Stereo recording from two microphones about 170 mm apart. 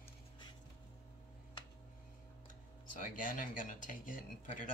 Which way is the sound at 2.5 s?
50° left (ahead or behind).